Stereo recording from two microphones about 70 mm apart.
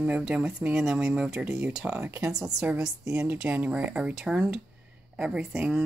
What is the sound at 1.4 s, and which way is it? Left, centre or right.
Speech, right.